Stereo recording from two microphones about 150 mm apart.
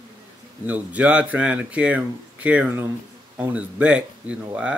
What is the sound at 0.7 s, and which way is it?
Speech, 10° right (ahead or behind).